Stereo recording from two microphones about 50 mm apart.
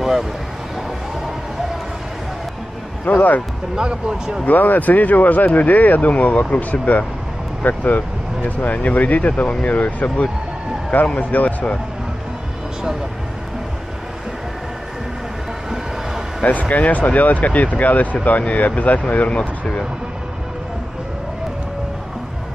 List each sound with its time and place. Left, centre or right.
0.0 s speech: centre
3.1 s speech: left
3.7 s speech: centre
4.5 s speech: left
16.4 s speech: left